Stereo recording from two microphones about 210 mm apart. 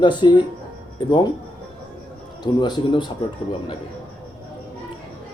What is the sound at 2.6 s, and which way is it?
Speech, 20° left (ahead or behind).